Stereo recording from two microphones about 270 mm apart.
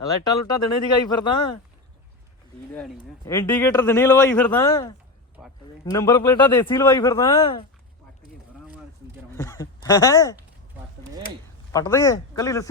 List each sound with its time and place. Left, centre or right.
0.3 s a man's voice: centre
2.7 s a man's voice: centre
9.4 s speech: centre
11.7 s a man's voice: centre